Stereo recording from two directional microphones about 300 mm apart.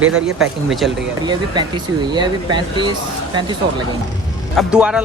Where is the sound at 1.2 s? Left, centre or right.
Centre.